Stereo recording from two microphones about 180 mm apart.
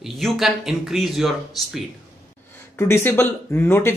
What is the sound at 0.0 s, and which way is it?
Speech, centre (ahead or behind).